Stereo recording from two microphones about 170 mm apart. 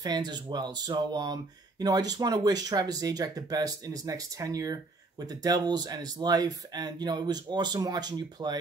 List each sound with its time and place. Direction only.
0.0 s speech: 25° right (ahead or behind)